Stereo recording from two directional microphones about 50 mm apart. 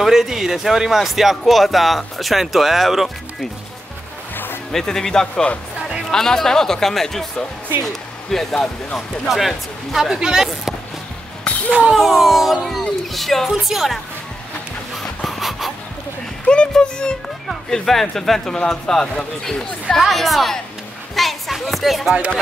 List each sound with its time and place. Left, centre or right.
0.0 s speech: centre
4.7 s speech: centre
5.3 s speech: left
6.0 s speech: centre
9.9 s speech: centre
11.5 s a sound: left
11.9 s speech: centre
15.2 s pant: centre
16.4 s speech: centre
17.8 s speech: centre
21.1 s a sound: centre